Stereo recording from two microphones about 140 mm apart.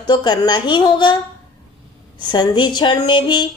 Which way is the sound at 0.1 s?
30° left (ahead or behind).